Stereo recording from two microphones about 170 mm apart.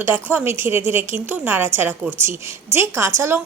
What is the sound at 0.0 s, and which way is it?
A woman's voice, 15° right (ahead or behind).